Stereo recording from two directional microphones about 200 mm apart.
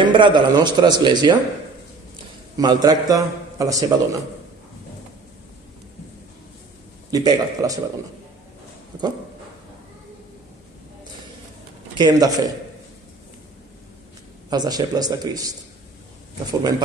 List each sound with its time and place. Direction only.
0.0 s a man's voice: 20° right (ahead or behind)
2.5 s a man's voice: 20° right (ahead or behind)
7.1 s a man's voice: 20° right (ahead or behind)
12.0 s a man's voice: 20° right (ahead or behind)
14.5 s a man's voice: 20° right (ahead or behind)